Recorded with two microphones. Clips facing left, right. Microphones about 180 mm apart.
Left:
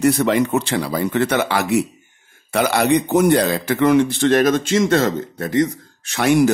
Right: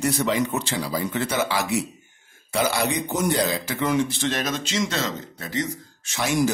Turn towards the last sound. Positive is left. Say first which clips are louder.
# left 8 dB
turn(degrees=65)  # may be behind; listen again after turning